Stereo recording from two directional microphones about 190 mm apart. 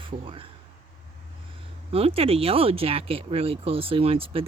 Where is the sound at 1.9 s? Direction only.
30° right (ahead or behind).